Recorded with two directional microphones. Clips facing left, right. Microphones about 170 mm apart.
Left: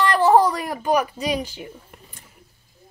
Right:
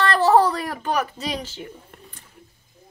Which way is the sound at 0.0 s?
15° left (ahead or behind).